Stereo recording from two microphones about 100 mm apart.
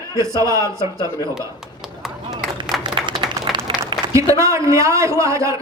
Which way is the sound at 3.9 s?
50° right (ahead or behind).